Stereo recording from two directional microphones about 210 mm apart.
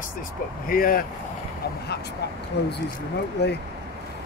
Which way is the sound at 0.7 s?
45° left (ahead or behind).